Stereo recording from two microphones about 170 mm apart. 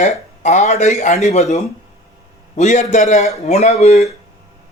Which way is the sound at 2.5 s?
45° left (ahead or behind).